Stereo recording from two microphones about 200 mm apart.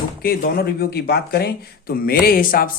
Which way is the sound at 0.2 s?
50° left (ahead or behind).